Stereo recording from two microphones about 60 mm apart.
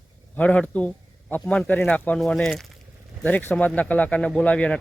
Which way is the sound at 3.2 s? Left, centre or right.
Left.